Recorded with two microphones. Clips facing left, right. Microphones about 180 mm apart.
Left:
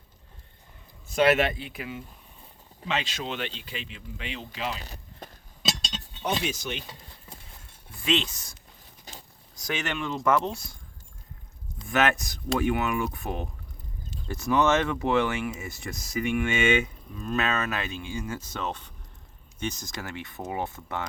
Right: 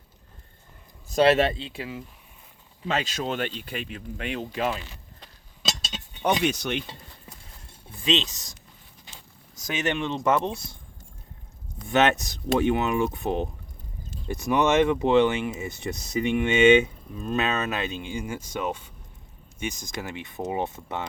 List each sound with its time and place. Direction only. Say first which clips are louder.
1.0 s speech: right 3 dB; 35° right (ahead or behind)
2.8 s speech: right 3 dB; 45° right (ahead or behind)
4.7 s a sound: right 4 dB; 40° left (ahead or behind)
5.6 s chink: left 1 dB; centre (ahead or behind)
6.4 s a sound: right 6 dB; 65° right (ahead or behind)
7.9 s speech: right 1 dB; 20° right (ahead or behind)
9.1 s a sound: left 4 dB; 40° left (ahead or behind)
9.6 s speech: right 3 dB; 20° right (ahead or behind)
11.9 s speech: right 3 dB; 25° right (ahead or behind)